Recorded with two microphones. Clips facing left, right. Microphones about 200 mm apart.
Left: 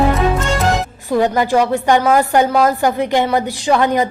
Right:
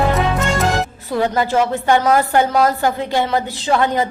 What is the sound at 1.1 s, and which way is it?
A woman's voice, 15° left (ahead or behind).